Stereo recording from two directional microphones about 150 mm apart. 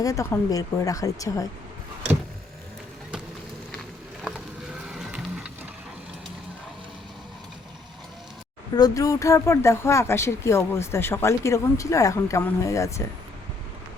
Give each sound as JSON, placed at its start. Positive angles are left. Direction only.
{"t": 0.0, "sound": "speech", "side_deg": 20}
{"t": 4.7, "sound": "music", "side_deg": -5}
{"t": 8.7, "sound": "speech", "side_deg": 25}